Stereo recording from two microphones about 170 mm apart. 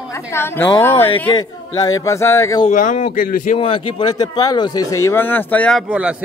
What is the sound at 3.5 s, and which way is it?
Speech, 30° left (ahead or behind).